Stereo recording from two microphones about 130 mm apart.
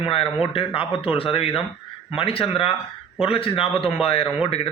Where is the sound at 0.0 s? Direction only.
45° left (ahead or behind).